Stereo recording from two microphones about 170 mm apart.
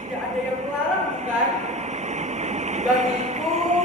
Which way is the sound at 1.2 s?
40° right (ahead or behind).